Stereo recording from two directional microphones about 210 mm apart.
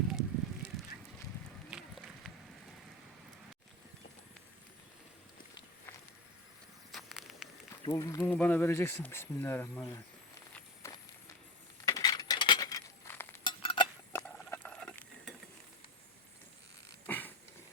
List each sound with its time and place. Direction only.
0.1 s fire: 5° right (ahead or behind)
1.7 s run: centre (ahead or behind)
6.9 s patter: centre (ahead or behind)
7.9 s speech: 15° left (ahead or behind)
10.8 s run: 15° left (ahead or behind)
11.9 s cutlery: 20° left (ahead or behind)
13.4 s cutlery: 20° left (ahead or behind)
14.1 s a sound: 10° left (ahead or behind)
17.1 s a sound: 10° left (ahead or behind)